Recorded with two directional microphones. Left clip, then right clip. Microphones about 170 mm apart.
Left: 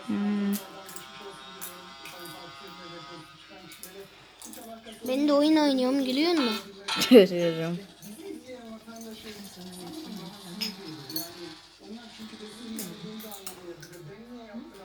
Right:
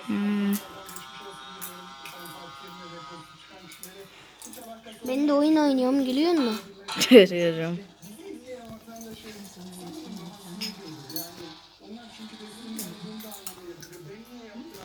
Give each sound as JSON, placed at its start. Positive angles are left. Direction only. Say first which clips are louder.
{"t": 0.0, "sound": "music", "louder": "right 2 dB", "side_deg": -5}
{"t": 2.1, "sound": "music", "louder": "right 1 dB", "side_deg": 0}
{"t": 5.0, "sound": "a woman's voice", "louder": "even", "side_deg": -40}
{"t": 6.3, "sound": "speech", "louder": "right 1 dB", "side_deg": 5}
{"t": 9.6, "sound": "a sound", "louder": "even", "side_deg": -20}
{"t": 12.2, "sound": "music", "louder": "even", "side_deg": -40}